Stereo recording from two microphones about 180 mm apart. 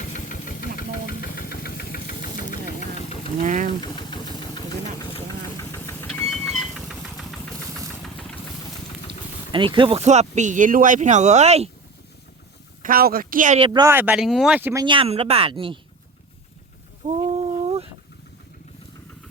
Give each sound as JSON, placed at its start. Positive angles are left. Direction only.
{"t": 0.1, "sound": "engine", "side_deg": 50}
{"t": 3.4, "sound": "engine", "side_deg": -45}
{"t": 3.8, "sound": "vehicle", "side_deg": 25}
{"t": 6.2, "sound": "vehicle", "side_deg": 0}
{"t": 9.0, "sound": "speech", "side_deg": -25}
{"t": 12.8, "sound": "speech", "side_deg": -55}
{"t": 13.6, "sound": "speech", "side_deg": -25}
{"t": 13.9, "sound": "speech", "side_deg": -10}
{"t": 14.8, "sound": "speech", "side_deg": -30}
{"t": 17.3, "sound": "a sound", "side_deg": -35}